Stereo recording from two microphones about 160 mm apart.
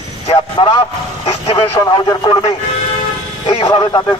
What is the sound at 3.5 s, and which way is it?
Speech, 30° left (ahead or behind).